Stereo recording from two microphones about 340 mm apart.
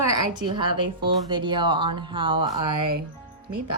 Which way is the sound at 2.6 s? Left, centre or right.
Right.